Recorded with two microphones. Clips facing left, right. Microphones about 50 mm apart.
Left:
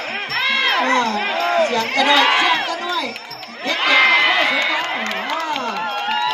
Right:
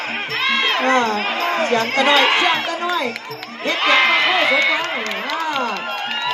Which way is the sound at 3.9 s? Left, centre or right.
Centre.